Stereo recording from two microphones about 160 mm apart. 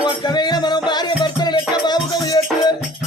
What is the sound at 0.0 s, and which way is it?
Music, 25° left (ahead or behind).